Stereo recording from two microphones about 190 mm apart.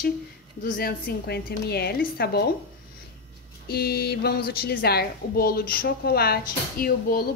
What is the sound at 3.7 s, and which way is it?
A woman's voice, 55° left (ahead or behind).